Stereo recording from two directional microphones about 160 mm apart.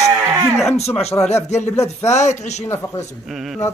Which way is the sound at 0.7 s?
40° left (ahead or behind).